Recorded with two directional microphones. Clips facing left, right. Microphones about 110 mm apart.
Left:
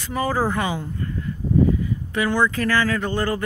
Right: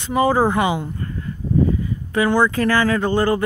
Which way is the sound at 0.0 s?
20° right (ahead or behind).